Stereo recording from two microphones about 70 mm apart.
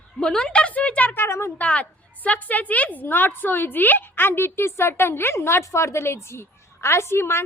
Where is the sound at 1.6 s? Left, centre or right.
Left.